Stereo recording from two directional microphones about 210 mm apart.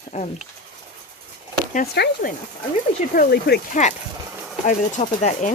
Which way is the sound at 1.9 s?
50° left (ahead or behind).